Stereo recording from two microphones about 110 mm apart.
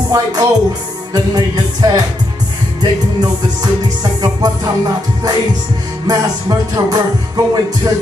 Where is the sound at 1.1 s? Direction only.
40° right (ahead or behind).